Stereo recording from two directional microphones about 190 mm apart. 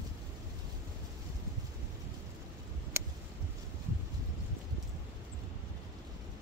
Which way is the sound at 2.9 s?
15° right (ahead or behind).